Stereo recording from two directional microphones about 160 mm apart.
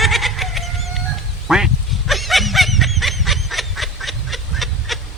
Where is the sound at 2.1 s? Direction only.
Centre (ahead or behind).